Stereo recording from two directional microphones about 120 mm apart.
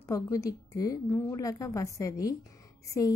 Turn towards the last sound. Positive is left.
turn(degrees=30)  # may be behind; listen again after turning